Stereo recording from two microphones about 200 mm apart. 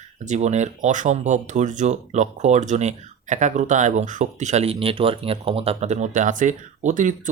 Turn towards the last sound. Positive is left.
turn(degrees=-40)  # may be behind; listen again after turning